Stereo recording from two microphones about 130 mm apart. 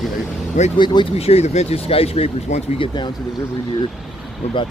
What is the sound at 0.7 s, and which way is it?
Speech, 35° left (ahead or behind).